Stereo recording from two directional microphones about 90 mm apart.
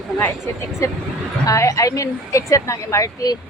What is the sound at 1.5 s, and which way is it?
A woman's voice, 35° left (ahead or behind).